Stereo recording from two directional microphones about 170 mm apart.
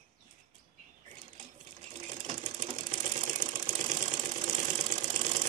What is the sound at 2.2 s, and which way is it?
Sewing machine, 45° right (ahead or behind).